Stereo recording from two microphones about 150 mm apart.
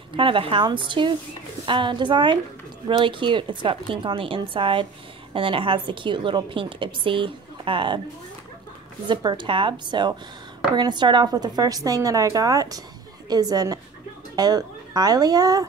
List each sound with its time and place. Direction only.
0.1 s a woman's voice: 35° right (ahead or behind)
9.0 s a woman's voice: 30° right (ahead or behind)